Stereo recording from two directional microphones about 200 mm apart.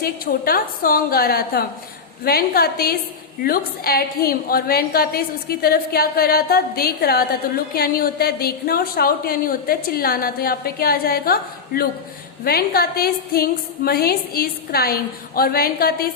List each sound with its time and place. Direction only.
0.0 s a woman's voice: 45° left (ahead or behind)